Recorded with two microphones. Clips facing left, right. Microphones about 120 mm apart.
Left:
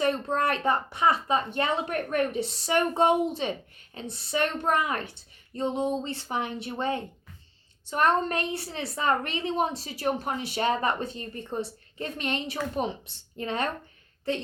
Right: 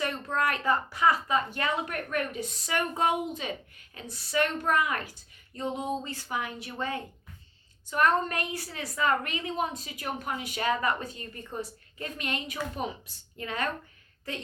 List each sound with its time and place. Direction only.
0.0 s speech: 25° left (ahead or behind)